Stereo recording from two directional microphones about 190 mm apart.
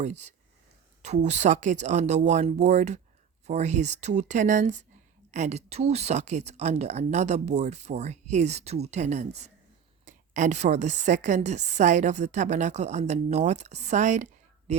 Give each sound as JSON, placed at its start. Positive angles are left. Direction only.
{"t": 0.0, "sound": "speech", "side_deg": -35}